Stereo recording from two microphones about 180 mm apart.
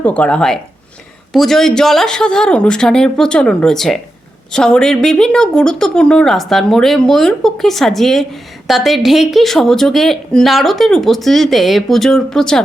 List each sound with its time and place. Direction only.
0.0 s a woman's voice: 5° left (ahead or behind)